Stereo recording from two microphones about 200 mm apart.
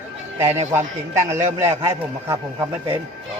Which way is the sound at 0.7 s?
15° right (ahead or behind).